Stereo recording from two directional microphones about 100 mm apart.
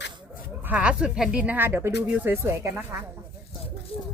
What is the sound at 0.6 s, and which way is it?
Speech, 15° right (ahead or behind).